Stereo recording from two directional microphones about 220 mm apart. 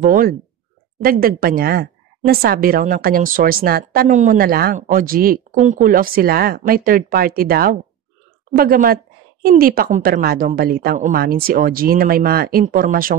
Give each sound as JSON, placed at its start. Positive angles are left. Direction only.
{"t": 0.0, "sound": "a woman's voice", "side_deg": -40}